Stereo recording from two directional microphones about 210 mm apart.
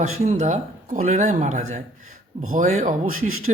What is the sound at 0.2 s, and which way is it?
Speech, 35° right (ahead or behind).